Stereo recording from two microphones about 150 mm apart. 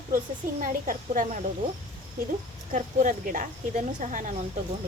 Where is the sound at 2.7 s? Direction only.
60° right (ahead or behind).